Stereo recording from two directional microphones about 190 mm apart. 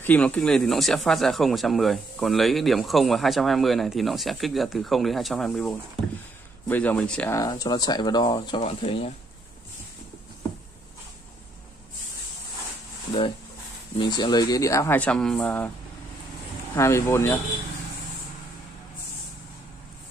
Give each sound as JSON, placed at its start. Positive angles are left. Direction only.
{"t": 0.0, "sound": "speech", "side_deg": 10}
{"t": 7.3, "sound": "speech", "side_deg": 20}
{"t": 8.6, "sound": "speech", "side_deg": 35}
{"t": 13.9, "sound": "speech", "side_deg": 25}
{"t": 16.7, "sound": "speech", "side_deg": 15}